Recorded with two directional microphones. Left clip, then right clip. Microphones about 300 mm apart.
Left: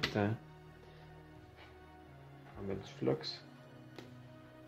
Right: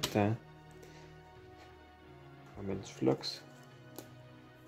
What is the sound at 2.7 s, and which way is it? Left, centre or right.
Speech, right.